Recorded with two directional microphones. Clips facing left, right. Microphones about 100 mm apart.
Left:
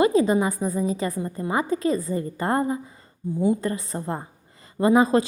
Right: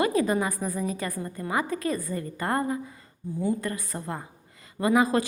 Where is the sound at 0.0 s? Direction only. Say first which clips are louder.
Left 5 dB; 25° left (ahead or behind).